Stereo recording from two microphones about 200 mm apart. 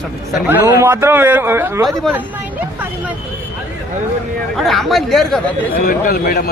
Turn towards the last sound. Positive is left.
turn(degrees=50)  # may be behind; listen again after turning